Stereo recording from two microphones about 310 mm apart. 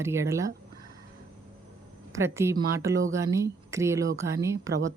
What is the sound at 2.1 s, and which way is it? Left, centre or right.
Speech, centre.